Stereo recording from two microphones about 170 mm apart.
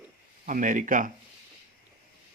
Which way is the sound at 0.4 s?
50° right (ahead or behind).